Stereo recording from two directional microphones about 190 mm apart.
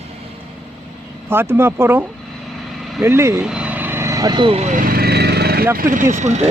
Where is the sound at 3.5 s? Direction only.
5° right (ahead or behind); by 5.6 s 55° right (ahead or behind).